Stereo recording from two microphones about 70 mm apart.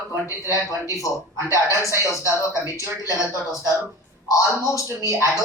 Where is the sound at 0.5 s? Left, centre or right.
Left.